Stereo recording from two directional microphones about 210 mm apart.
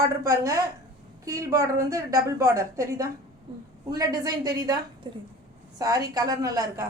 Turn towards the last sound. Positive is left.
turn(degrees=-15)  # may be behind; listen again after turning